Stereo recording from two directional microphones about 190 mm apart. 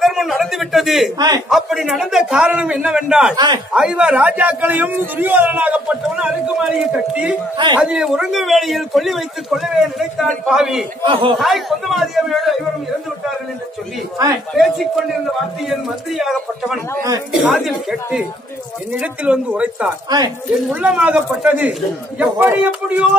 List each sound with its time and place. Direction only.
0.0 s a man's voice: centre (ahead or behind)
1.1 s speech: 20° right (ahead or behind)
1.5 s a man's voice: centre (ahead or behind)
3.3 s speech: 20° right (ahead or behind)
3.7 s a man's voice: 5° right (ahead or behind)
7.5 s speech: 25° right (ahead or behind)
7.8 s a man's voice: 5° right (ahead or behind)
14.1 s speech: 20° right (ahead or behind)
14.5 s a man's voice: centre (ahead or behind)